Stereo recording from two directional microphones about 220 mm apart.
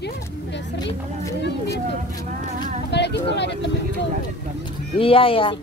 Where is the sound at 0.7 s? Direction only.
20° left (ahead or behind).